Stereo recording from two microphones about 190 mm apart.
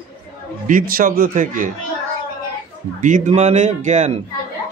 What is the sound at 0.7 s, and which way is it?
Speech, 50° right (ahead or behind).